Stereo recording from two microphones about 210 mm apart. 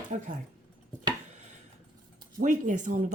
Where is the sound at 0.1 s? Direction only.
35° right (ahead or behind).